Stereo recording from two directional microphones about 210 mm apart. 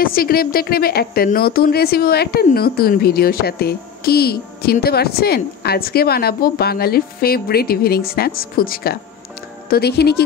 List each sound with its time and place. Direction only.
0.0 s speech: 45° left (ahead or behind)